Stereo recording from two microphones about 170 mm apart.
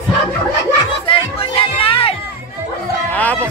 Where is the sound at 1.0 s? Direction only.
35° left (ahead or behind).